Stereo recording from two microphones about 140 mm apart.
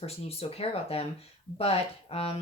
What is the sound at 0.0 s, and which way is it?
Speech, 45° left (ahead or behind).